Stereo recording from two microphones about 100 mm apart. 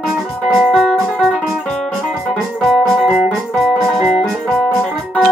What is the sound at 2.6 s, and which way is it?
Music, 5° right (ahead or behind).